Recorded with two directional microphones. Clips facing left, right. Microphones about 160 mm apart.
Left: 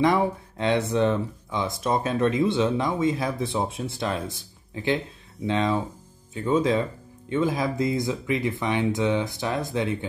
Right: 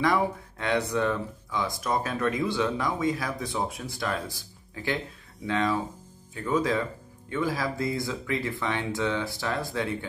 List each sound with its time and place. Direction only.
0.0 s speech: 25° left (ahead or behind)